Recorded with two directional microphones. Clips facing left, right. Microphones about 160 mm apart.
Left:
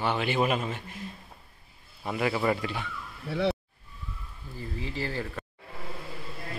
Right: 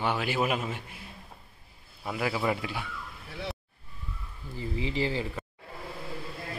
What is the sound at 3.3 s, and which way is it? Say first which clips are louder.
Speech: left 11 dB; 65° left (ahead or behind).